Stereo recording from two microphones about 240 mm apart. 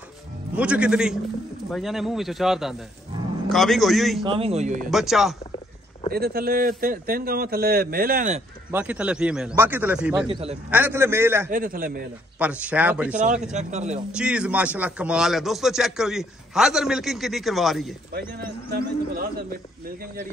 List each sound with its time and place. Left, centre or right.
0.6 s speech: centre
4.3 s speech: right
4.9 s speech: centre
6.1 s speech: right
8.7 s a man's voice: centre
11.5 s speech: right
12.4 s speech: centre
13.5 s speech: right
14.1 s speech: centre
18.1 s speech: right